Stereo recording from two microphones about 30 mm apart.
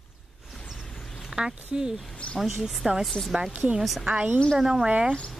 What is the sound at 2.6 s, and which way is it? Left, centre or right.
Speech, centre.